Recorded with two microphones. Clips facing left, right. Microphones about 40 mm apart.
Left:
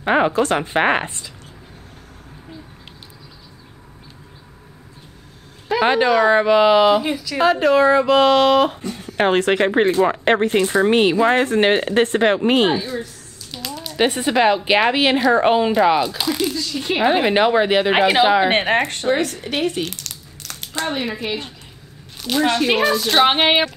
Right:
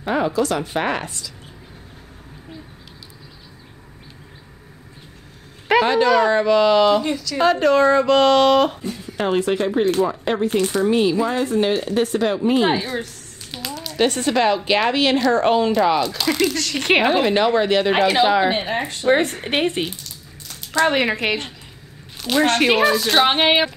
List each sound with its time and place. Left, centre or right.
0.0 s speech: left
5.8 s a woman's voice: left; by 8.7 s centre
8.9 s speech: left
9.8 s speech: left
12.6 s speech: right
13.5 s a sound: centre
13.9 s a woman's voice: centre
16.5 s speech: right
17.0 s a woman's voice: centre
18.5 s speech: left
19.0 s speech: right
19.9 s a sound: left
20.9 s speech: right
22.3 s a woman's voice: centre